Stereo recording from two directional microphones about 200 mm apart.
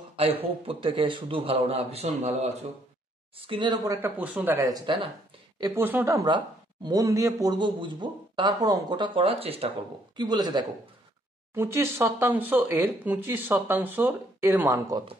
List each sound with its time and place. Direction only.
0.1 s speech: 30° right (ahead or behind)